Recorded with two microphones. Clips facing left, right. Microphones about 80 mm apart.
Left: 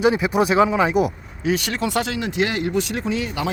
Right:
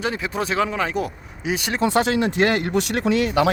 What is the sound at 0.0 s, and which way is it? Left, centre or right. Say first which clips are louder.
Speech: left 7 dB; centre.